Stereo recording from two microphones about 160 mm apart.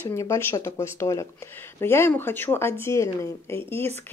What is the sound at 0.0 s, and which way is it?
Speech, 20° left (ahead or behind).